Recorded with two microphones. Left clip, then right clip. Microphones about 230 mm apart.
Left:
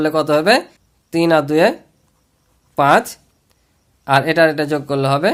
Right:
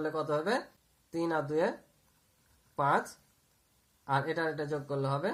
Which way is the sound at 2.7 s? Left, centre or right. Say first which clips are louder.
Left 16 dB; left.